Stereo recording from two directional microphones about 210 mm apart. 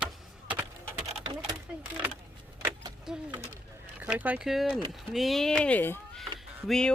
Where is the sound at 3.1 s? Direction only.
5° right (ahead or behind).